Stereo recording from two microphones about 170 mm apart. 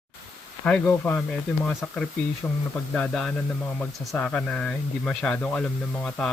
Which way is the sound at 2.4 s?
15° left (ahead or behind).